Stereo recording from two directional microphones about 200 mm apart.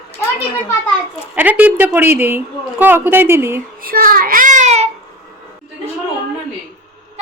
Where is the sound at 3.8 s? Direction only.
45° right (ahead or behind).